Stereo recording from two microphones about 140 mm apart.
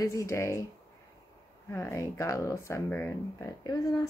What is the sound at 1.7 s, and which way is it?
Speech, 20° left (ahead or behind).